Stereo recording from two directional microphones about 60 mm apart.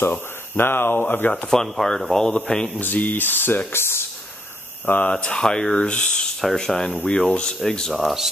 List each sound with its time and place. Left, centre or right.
0.0 s speech: left
1.5 s speech: centre
2.8 s speech: left
4.8 s speech: left
6.4 s speech: centre
6.9 s speech: left
7.9 s speech: centre